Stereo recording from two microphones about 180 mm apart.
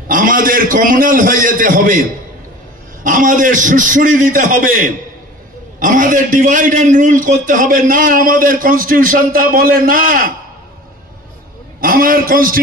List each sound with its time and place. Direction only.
0.1 s a man's voice: 50° right (ahead or behind)
3.0 s a man's voice: 45° right (ahead or behind)
11.8 s a man's voice: 50° right (ahead or behind)